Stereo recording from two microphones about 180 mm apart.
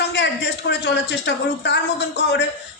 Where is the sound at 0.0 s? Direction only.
70° left (ahead or behind).